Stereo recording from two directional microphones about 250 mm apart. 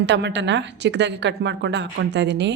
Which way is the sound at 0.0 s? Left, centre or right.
Right.